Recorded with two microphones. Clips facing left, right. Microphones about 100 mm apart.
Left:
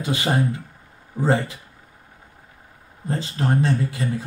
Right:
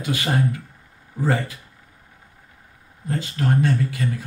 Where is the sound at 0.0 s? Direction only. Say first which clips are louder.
Left 1 dB; 30° left (ahead or behind).